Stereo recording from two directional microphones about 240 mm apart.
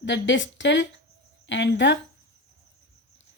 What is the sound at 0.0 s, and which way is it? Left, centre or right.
Speech, left.